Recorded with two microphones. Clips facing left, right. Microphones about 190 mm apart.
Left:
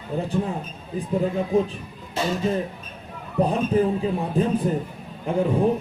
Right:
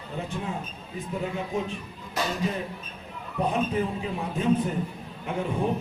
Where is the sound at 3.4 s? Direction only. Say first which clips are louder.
Left 5 dB; 35° left (ahead or behind).